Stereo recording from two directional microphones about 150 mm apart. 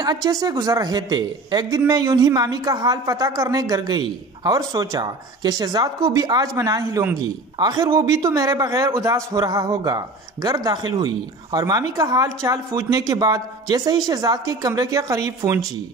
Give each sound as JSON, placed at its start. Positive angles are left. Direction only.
{"t": 0.0, "sound": "a man's voice", "side_deg": -25}